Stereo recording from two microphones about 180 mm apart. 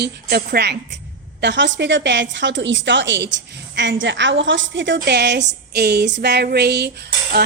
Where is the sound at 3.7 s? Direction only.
80° right.